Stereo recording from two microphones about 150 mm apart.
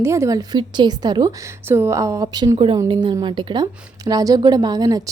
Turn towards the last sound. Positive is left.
turn(degrees=-25)  # may be behind; listen again after turning